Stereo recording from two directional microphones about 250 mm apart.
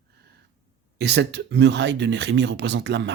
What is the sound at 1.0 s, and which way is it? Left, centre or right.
Speech, right.